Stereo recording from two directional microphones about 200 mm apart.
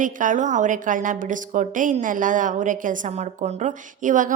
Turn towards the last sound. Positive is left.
turn(degrees=-40)  # may be behind; listen again after turning